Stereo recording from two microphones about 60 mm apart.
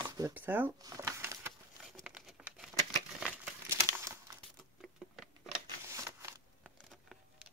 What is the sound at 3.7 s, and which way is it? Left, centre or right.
Crumpling, right.